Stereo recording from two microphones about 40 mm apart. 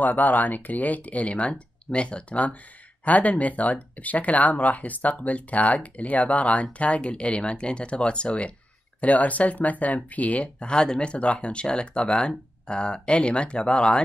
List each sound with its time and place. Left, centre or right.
0.0 s speech: left